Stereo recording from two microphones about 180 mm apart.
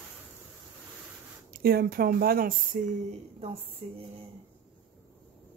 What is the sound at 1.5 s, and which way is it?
Speech, 55° right (ahead or behind).